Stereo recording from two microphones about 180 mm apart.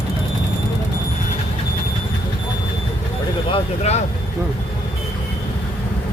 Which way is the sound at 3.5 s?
35° left (ahead or behind).